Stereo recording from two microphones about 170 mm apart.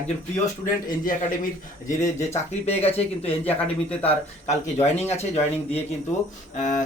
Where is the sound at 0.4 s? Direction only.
50° left (ahead or behind).